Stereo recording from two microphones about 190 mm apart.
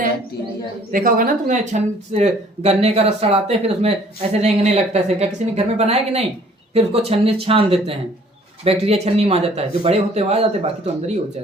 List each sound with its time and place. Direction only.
0.9 s speech: 45° right (ahead or behind)